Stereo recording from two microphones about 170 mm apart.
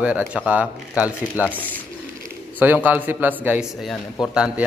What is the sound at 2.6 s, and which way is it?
Speech, 10° right (ahead or behind).